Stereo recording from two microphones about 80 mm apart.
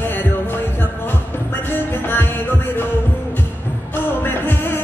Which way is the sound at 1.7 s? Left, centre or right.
Left.